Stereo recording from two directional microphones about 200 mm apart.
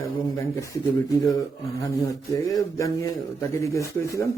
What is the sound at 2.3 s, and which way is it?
A man's voice, 15° left (ahead or behind).